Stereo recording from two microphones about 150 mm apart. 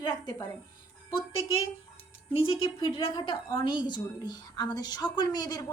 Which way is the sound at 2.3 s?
35° left (ahead or behind).